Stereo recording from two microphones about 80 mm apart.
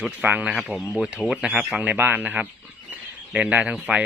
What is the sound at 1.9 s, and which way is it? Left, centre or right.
Speech, right.